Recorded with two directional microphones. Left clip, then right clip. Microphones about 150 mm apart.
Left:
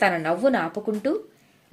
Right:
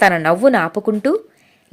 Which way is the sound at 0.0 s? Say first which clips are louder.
Right 8 dB; 50° right (ahead or behind).